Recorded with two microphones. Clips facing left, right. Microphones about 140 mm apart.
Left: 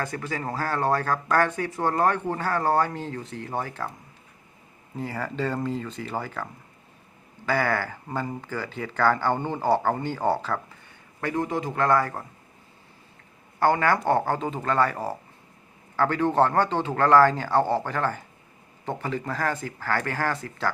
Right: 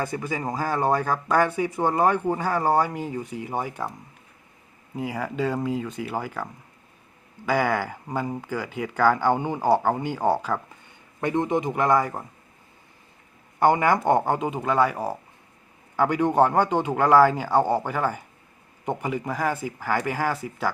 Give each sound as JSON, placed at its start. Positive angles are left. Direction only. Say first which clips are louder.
{"t": 0.0, "sound": "speech", "louder": "right 2 dB", "side_deg": -10}
{"t": 4.9, "sound": "speech", "louder": "right 2 dB", "side_deg": -10}
{"t": 13.6, "sound": "speech", "louder": "right 2 dB", "side_deg": -15}